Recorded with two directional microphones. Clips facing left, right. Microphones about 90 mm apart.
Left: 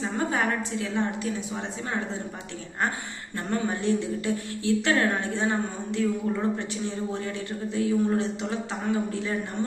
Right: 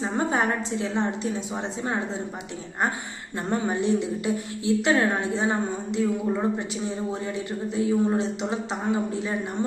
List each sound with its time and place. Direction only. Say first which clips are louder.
0.0 s a woman's voice: right 2 dB; 25° right (ahead or behind)
3.5 s a woman's voice: right 2 dB; 20° right (ahead or behind)